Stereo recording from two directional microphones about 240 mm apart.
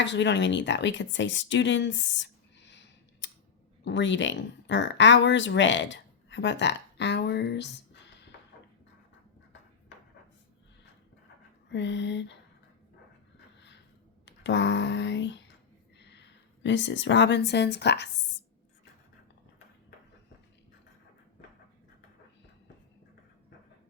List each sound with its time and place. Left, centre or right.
0.0 s speech: left
11.7 s speech: left
14.3 s speech: left
16.0 s a sound: left
16.6 s speech: left